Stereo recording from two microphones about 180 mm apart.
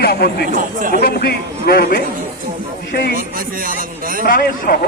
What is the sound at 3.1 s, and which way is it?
Speech, 50° right (ahead or behind).